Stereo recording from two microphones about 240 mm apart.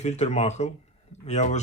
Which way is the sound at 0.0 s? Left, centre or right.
Left.